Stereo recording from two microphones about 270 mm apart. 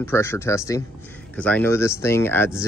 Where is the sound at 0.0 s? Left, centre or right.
Centre.